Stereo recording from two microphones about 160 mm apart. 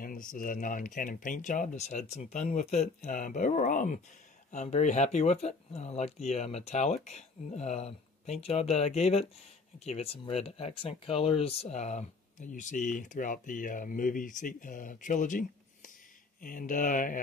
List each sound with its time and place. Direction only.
0.0 s speech: 60° left (ahead or behind)